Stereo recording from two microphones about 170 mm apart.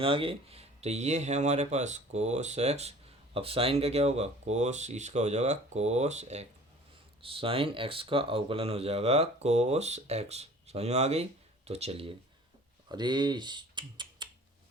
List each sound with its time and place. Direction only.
0.0 s speech: 30° right (ahead or behind)